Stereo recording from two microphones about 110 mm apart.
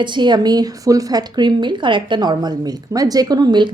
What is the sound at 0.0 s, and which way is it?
A woman's voice, 45° right (ahead or behind).